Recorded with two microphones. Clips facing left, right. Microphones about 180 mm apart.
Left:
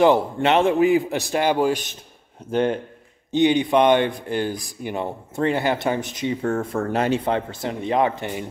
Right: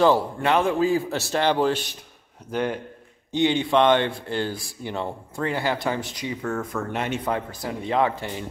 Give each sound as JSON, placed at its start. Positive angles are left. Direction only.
{"t": 0.0, "sound": "speech", "side_deg": 20}
{"t": 2.5, "sound": "speech", "side_deg": 25}